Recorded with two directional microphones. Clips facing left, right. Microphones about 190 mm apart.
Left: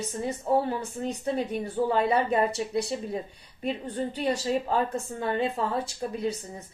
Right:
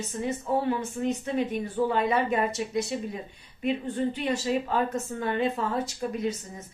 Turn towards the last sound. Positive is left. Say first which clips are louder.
# right 1 dB
turn(degrees=30)  # may be behind; listen again after turning